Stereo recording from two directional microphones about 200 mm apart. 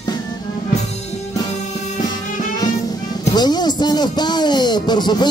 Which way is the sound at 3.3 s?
20° left (ahead or behind).